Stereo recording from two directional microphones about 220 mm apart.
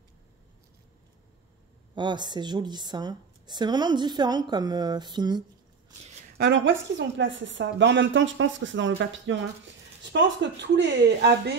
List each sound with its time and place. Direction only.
2.0 s a woman's voice: 20° right (ahead or behind)
6.3 s a woman's voice: 50° right (ahead or behind)